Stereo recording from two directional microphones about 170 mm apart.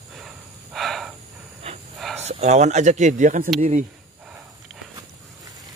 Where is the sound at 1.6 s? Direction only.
35° right (ahead or behind).